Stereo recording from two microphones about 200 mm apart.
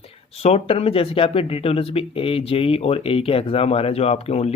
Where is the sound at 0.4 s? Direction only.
30° left (ahead or behind).